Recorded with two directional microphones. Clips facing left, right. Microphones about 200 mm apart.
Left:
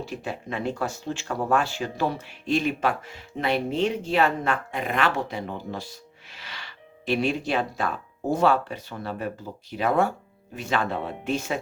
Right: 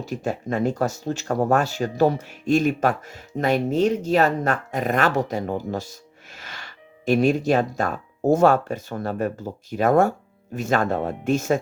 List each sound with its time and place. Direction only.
0.0 s speech: 45° right (ahead or behind)